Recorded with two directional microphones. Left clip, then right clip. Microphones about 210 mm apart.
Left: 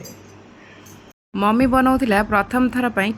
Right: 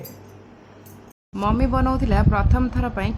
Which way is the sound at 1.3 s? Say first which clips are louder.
Left 6 dB; 15° left (ahead or behind).